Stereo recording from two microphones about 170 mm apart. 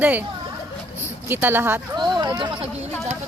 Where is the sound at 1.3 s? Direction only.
10° right (ahead or behind).